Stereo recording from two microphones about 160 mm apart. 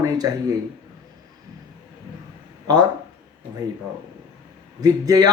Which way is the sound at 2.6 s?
25° right (ahead or behind).